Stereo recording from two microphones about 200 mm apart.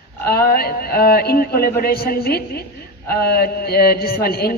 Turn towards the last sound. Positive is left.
turn(degrees=50)  # may be behind; listen again after turning